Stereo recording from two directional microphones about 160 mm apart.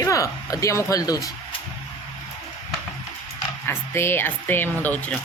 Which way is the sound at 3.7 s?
15° left (ahead or behind).